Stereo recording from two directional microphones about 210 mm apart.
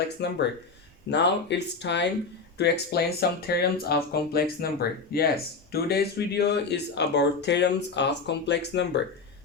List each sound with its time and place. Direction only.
0.2 s speech: 50° left (ahead or behind)